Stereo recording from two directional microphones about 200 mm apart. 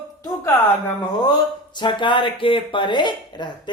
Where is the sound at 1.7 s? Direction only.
25° left (ahead or behind).